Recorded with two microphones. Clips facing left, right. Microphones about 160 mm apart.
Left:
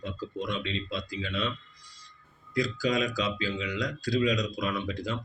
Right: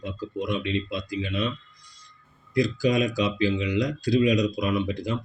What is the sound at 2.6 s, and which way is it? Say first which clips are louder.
Speech: right 5 dB; 20° right (ahead or behind).